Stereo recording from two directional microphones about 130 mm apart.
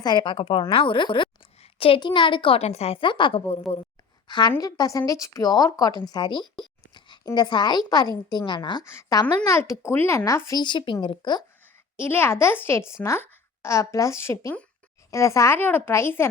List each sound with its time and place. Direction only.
0.0 s a woman's voice: 35° left (ahead or behind)
8.8 s speech: 20° left (ahead or behind)
10.6 s speech: 35° left (ahead or behind)
11.9 s speech: 15° left (ahead or behind)